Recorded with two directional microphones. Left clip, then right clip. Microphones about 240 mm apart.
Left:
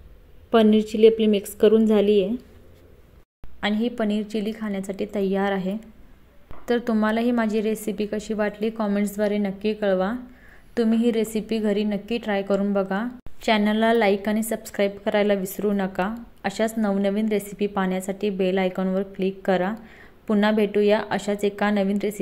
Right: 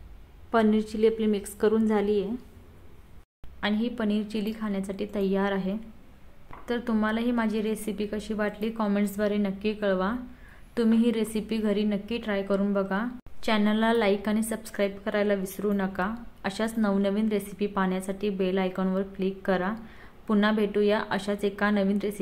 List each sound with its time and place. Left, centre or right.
0.7 s a woman's voice: centre
3.6 s a woman's voice: centre